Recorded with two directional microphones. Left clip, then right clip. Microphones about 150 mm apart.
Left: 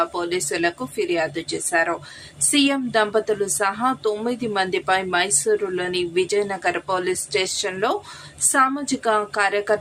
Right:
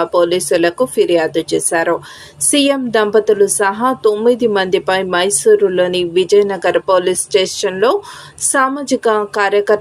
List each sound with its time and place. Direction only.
0.0 s a woman's voice: 20° right (ahead or behind)